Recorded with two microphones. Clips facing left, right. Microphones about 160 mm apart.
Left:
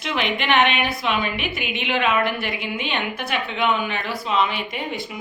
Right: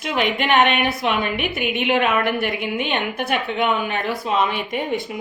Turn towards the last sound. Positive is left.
turn(degrees=-50)  # may be behind; listen again after turning